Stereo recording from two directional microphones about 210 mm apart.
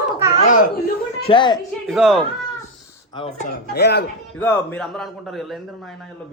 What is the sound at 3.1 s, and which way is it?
Speech, 20° left (ahead or behind).